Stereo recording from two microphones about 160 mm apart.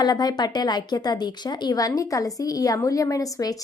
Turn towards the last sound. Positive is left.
turn(degrees=20)  # may be behind; listen again after turning